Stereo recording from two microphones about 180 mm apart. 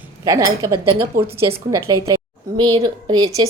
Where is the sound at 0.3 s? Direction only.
20° right (ahead or behind).